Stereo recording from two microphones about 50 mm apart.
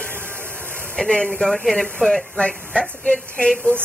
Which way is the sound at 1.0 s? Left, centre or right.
Centre.